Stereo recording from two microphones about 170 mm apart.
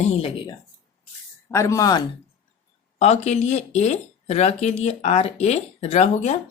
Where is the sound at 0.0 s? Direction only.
40° left (ahead or behind).